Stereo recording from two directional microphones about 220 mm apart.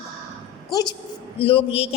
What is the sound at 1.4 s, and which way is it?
Speech, 25° left (ahead or behind).